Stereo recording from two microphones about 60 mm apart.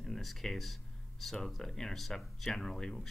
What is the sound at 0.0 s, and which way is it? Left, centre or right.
Speech, centre.